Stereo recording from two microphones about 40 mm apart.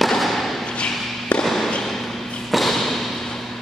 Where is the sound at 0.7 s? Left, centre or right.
Left.